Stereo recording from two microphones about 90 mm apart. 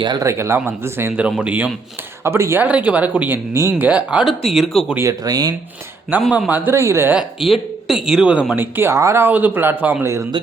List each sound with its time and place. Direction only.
0.2 s speech: 30° right (ahead or behind)
1.1 s speech: 15° right (ahead or behind)
2.2 s speech: 30° right (ahead or behind)
2.6 s speech: 15° right (ahead or behind)
3.8 s speech: 15° right (ahead or behind)
4.3 s speech: centre (ahead or behind)
5.2 s speech: 45° right (ahead or behind)
6.1 s speech: 20° right (ahead or behind)
6.7 s speech: 30° right (ahead or behind)
7.1 s speech: 5° right (ahead or behind)
8.5 s speech: 25° right (ahead or behind)